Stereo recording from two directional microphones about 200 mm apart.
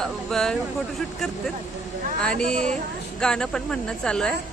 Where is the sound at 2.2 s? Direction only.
5° left (ahead or behind).